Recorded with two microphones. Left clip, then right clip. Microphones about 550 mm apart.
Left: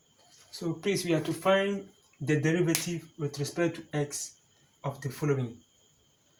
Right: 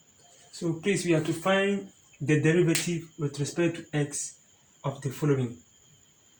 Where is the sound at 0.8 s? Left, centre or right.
Left.